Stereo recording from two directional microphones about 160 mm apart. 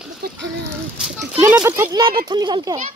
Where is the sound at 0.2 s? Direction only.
85° right.